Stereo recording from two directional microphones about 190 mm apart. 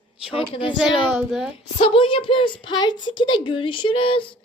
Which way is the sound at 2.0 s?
25° left (ahead or behind).